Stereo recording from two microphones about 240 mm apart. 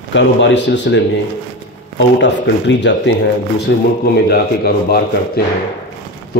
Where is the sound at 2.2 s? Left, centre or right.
Left.